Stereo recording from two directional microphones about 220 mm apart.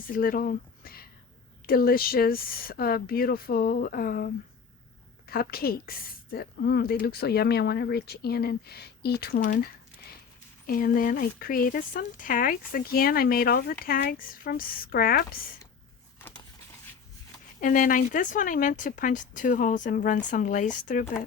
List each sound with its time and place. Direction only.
0.1 s a woman's voice: 40° left (ahead or behind)
5.3 s a woman's voice: 45° left (ahead or behind)
17.6 s speech: 35° left (ahead or behind)